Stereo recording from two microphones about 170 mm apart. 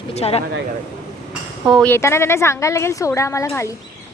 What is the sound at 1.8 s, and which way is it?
A woman's voice, 15° left (ahead or behind).